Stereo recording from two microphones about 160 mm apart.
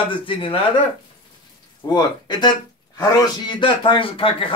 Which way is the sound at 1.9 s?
30° left (ahead or behind).